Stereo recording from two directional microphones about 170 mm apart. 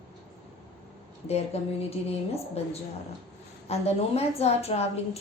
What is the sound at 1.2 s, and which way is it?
Speech, 40° left (ahead or behind).